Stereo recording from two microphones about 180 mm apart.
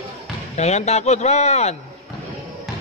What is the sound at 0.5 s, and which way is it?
A man's voice, 40° left (ahead or behind).